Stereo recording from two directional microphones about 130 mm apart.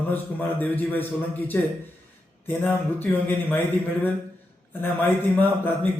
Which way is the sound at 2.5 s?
15° left (ahead or behind).